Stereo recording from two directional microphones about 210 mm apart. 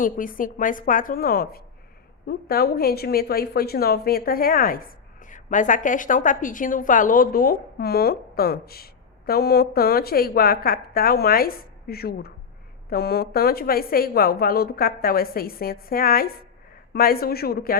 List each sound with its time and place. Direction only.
0.0 s a woman's voice: 40° left (ahead or behind)